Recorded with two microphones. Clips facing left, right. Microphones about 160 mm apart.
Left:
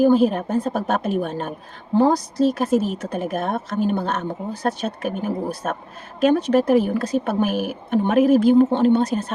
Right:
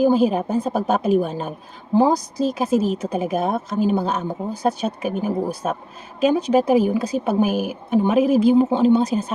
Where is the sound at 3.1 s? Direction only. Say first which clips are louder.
Right 2 dB; centre (ahead or behind).